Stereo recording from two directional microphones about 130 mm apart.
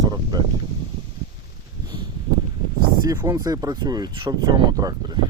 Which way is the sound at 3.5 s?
30° right (ahead or behind).